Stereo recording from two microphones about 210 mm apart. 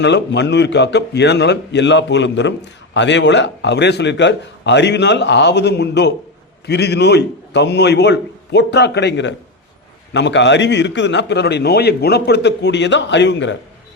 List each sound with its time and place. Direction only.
0.0 s a man's voice: 55° left (ahead or behind)